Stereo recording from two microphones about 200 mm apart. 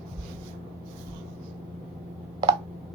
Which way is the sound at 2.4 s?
20° right (ahead or behind).